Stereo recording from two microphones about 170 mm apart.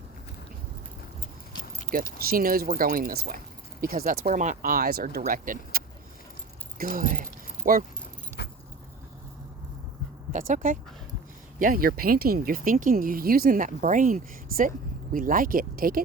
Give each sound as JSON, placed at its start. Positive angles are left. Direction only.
{"t": 2.1, "sound": "speech", "side_deg": -60}
{"t": 4.3, "sound": "speech", "side_deg": -45}
{"t": 8.4, "sound": "keys jangling", "side_deg": 70}
{"t": 10.3, "sound": "speech", "side_deg": -50}